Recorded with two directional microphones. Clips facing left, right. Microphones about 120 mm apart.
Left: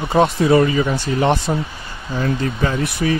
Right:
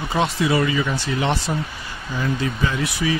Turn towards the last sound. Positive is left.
turn(degrees=55)  # may be behind; listen again after turning